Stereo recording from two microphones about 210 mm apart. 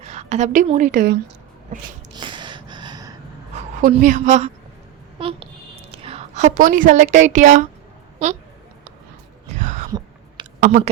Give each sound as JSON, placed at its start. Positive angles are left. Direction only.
{"t": 0.0, "sound": "a woman's voice", "side_deg": -30}
{"t": 2.1, "sound": "gasp", "side_deg": -20}
{"t": 3.8, "sound": "a woman's voice", "side_deg": -40}
{"t": 5.2, "sound": "a sound", "side_deg": -25}
{"t": 9.6, "sound": "a sound", "side_deg": -35}
{"t": 10.6, "sound": "speech", "side_deg": -40}